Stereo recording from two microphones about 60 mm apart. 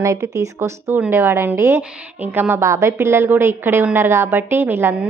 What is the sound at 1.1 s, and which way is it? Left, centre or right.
A woman's voice, right.